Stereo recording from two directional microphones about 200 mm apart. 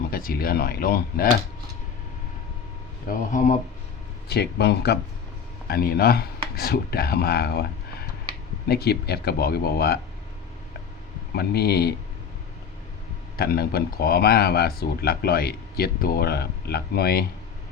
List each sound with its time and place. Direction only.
0.1 s speech: 45° left (ahead or behind)
3.1 s speech: 40° left (ahead or behind)
4.3 s speech: 55° left (ahead or behind)
11.3 s speech: 50° left (ahead or behind)
13.3 s speech: 50° left (ahead or behind)